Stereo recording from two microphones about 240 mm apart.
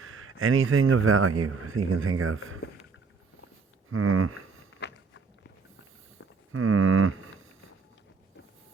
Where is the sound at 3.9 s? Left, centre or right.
Right.